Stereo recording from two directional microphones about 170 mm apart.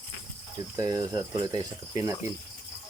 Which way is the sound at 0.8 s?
20° right (ahead or behind).